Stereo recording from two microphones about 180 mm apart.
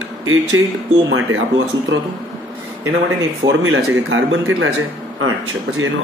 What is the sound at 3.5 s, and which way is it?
Speech, 90° right.